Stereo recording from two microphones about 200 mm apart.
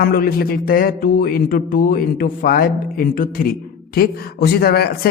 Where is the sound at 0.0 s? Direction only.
50° left (ahead or behind).